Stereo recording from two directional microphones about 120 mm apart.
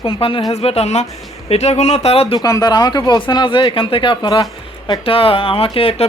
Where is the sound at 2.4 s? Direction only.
35° left (ahead or behind).